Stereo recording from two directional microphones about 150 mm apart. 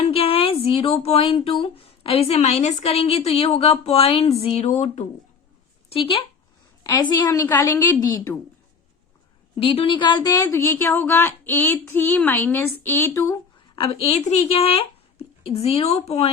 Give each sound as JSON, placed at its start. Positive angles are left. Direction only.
{"t": 0.0, "sound": "speech", "side_deg": 40}
{"t": 5.9, "sound": "speech", "side_deg": 40}
{"t": 7.1, "sound": "a woman's voice", "side_deg": 25}
{"t": 9.6, "sound": "a woman's voice", "side_deg": 35}
{"t": 13.7, "sound": "speech", "side_deg": 35}